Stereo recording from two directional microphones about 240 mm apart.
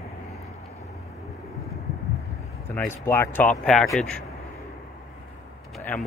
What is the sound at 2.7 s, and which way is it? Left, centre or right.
Speech, centre.